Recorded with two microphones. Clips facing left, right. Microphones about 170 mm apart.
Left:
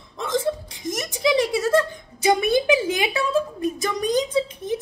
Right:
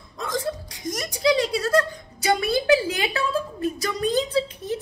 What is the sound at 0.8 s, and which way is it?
A woman's voice, 20° left (ahead or behind).